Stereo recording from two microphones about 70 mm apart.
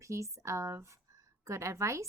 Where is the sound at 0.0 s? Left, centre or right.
Right.